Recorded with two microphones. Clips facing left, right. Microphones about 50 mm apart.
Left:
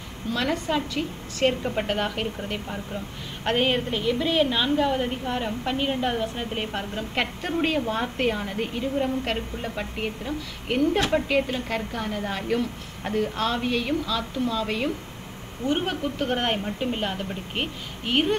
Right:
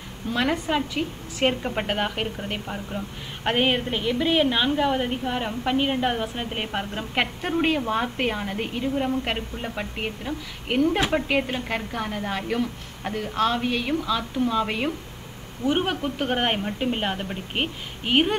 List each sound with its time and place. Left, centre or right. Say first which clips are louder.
0.3 s a woman's voice: right 1 dB; centre